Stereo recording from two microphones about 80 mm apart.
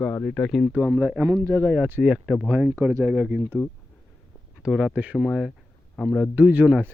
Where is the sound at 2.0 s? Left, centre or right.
Centre.